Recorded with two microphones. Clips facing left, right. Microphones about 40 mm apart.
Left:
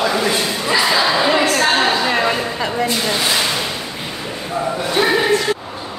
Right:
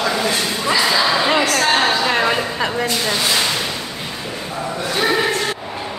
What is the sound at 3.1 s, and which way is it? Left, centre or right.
Speech, centre.